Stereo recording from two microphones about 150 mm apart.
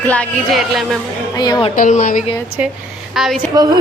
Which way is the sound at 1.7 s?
60° left (ahead or behind).